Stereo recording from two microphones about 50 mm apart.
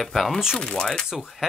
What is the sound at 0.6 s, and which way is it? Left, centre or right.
Speech, centre.